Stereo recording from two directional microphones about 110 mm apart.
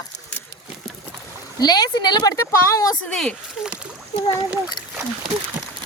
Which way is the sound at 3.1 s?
5° left (ahead or behind).